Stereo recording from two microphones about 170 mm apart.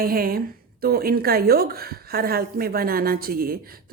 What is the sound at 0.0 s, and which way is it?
A woman's voice, 60° right (ahead or behind).